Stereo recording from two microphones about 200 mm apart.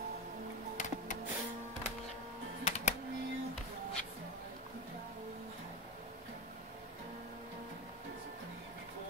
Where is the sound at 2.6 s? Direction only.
35° left (ahead or behind).